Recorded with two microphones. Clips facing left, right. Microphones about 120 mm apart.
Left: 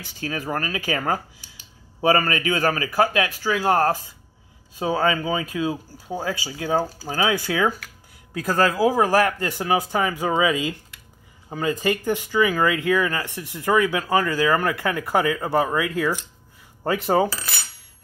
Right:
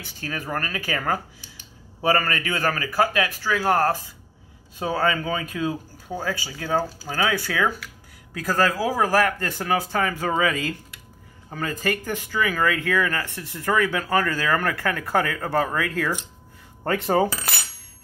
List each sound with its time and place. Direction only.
0.2 s a man's voice: 20° left (ahead or behind)
4.7 s speech: 15° left (ahead or behind)